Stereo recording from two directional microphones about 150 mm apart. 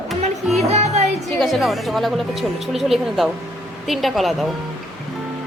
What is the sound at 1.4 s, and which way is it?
Speech, centre (ahead or behind).